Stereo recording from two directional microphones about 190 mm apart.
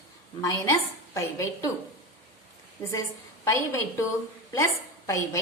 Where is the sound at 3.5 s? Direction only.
15° left (ahead or behind).